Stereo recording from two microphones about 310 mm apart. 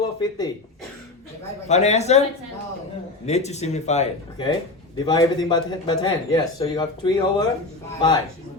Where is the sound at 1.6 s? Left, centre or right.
Left.